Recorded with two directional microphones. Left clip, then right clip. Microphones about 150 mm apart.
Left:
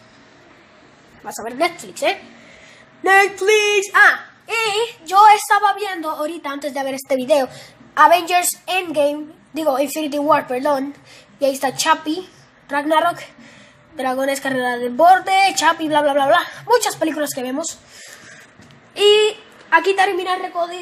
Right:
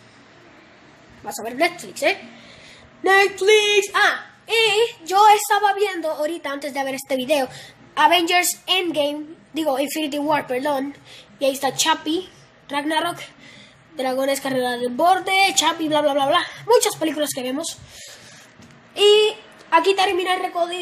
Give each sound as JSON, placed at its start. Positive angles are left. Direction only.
{"t": 1.2, "sound": "a woman's voice", "side_deg": -5}
{"t": 18.9, "sound": "a woman's voice", "side_deg": -5}
{"t": 19.7, "sound": "speech", "side_deg": -15}